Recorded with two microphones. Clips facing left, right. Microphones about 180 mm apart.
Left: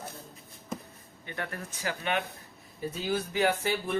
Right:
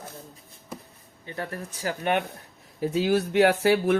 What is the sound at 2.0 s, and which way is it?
Speech, 55° right (ahead or behind).